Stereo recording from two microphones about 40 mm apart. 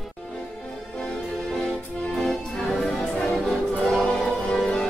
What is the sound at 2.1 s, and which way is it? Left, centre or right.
Music, centre.